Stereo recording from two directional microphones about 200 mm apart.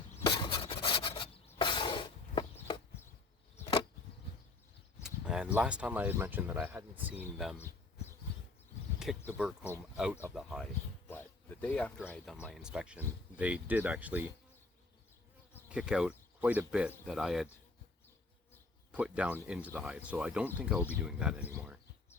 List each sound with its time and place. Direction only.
0.1 s rub: 20° left (ahead or behind)
5.0 s a sound: 5° right (ahead or behind)
5.5 s speech: 5° right (ahead or behind)
9.0 s speech: 5° right (ahead or behind)
15.7 s speech: 5° right (ahead or behind)
18.9 s speech: 5° right (ahead or behind)